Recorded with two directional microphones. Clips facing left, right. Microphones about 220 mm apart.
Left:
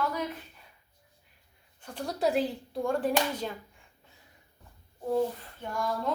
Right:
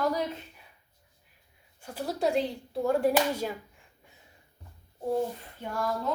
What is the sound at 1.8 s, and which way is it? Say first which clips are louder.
Speech: even; 5° right (ahead or behind).